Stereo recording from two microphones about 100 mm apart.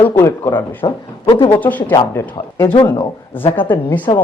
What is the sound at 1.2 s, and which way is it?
Speech, 60° left (ahead or behind).